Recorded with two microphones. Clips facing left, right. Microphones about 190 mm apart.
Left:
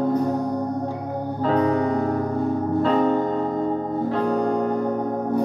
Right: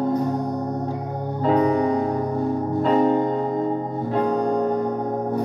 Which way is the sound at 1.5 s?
15° right (ahead or behind).